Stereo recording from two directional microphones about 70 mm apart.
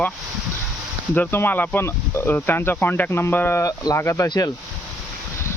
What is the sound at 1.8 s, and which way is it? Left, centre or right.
Speech, left.